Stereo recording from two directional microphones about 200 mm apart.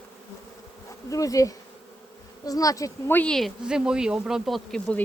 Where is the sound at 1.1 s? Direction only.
15° left (ahead or behind).